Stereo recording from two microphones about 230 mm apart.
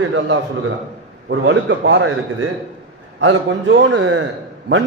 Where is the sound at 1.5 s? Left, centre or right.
Right.